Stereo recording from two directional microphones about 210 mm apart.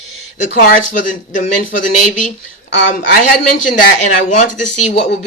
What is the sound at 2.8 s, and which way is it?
Speech, 40° left (ahead or behind).